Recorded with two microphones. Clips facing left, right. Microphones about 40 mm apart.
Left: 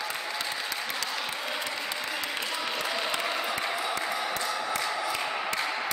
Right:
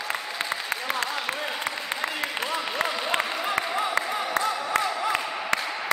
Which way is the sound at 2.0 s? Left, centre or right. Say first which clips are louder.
Right 4 dB; right.